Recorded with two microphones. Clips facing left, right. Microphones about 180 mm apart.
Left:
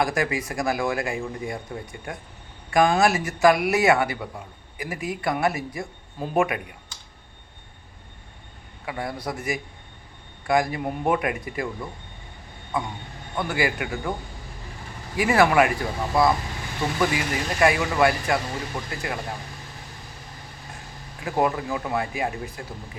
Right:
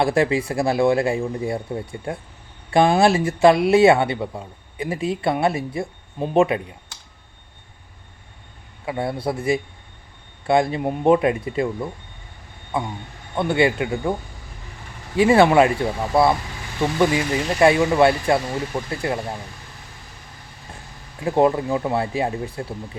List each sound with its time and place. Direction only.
0.0 s speech: 30° right (ahead or behind)
8.9 s speech: 25° right (ahead or behind)
12.7 s speech: 30° right (ahead or behind)
15.1 s speech: 30° right (ahead or behind)
21.2 s speech: 25° right (ahead or behind)